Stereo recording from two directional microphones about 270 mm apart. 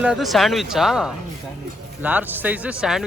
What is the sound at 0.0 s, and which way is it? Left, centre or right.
Speech, centre.